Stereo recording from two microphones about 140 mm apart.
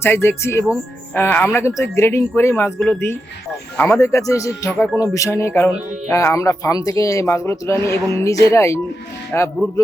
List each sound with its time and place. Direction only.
0.0 s speech: 15° left (ahead or behind)